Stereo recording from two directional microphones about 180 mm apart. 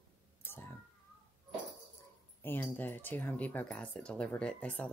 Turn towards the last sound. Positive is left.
turn(degrees=5)  # may be behind; listen again after turning